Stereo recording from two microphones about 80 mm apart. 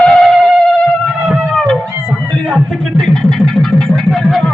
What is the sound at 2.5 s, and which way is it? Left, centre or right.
Speech, centre.